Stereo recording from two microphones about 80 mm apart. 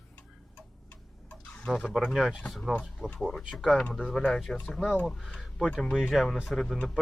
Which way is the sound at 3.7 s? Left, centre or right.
Centre.